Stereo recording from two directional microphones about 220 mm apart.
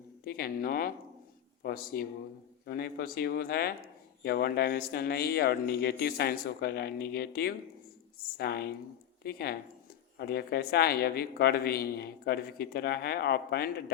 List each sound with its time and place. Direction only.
0.3 s speech: 45° left (ahead or behind)